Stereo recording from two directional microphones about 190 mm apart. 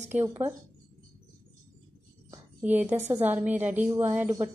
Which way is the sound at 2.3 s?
10° right (ahead or behind).